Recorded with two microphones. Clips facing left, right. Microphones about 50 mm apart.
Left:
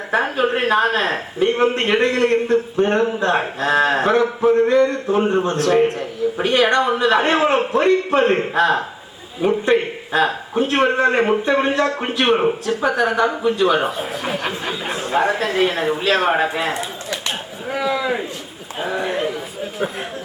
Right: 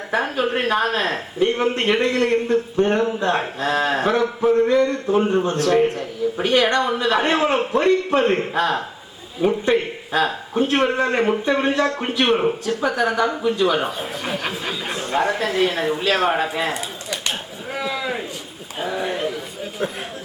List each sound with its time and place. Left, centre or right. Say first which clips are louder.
0.1 s a woman's voice: left 3 dB; left
16.7 s a man's voice: left 2 dB; centre